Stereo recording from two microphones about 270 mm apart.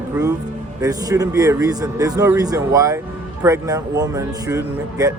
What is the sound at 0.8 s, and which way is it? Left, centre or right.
A man's voice, centre.